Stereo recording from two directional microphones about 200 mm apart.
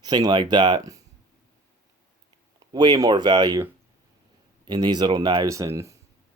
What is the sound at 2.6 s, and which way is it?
Speech, 20° right (ahead or behind).